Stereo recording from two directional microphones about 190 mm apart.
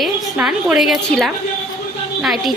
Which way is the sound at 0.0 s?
5° right (ahead or behind).